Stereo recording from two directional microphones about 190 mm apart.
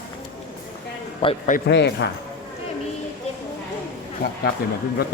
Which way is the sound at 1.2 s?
30° left (ahead or behind).